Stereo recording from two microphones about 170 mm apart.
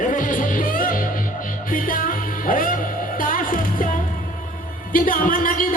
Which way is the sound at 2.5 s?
55° left (ahead or behind).